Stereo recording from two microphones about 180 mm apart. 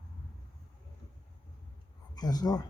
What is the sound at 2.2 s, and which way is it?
Speech, 20° left (ahead or behind).